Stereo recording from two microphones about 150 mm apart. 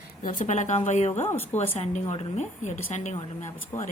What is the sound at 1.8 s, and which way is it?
Speech, 45° left (ahead or behind).